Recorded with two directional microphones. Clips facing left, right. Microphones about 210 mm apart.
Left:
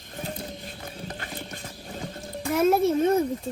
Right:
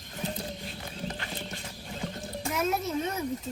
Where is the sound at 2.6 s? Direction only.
50° left (ahead or behind).